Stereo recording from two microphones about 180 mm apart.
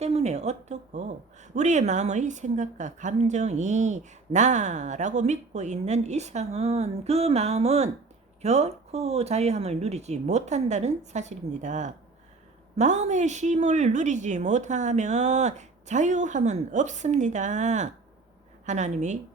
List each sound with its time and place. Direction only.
0.0 s a woman's voice: 35° right (ahead or behind)